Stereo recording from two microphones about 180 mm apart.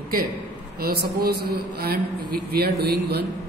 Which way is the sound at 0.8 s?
60° right (ahead or behind).